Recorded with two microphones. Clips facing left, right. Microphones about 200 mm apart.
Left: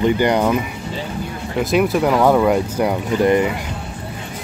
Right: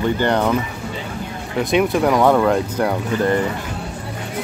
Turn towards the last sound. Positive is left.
turn(degrees=15)  # may be behind; listen again after turning